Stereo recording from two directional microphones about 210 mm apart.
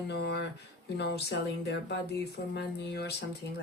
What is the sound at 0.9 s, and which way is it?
Speech, 50° left (ahead or behind).